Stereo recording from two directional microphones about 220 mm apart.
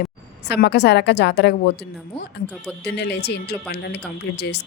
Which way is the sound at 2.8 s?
50° left (ahead or behind).